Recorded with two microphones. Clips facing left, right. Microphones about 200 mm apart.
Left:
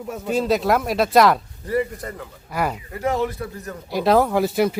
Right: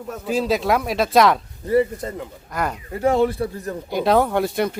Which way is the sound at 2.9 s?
30° right (ahead or behind).